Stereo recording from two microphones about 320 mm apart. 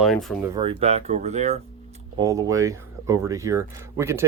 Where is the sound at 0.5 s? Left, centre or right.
Centre.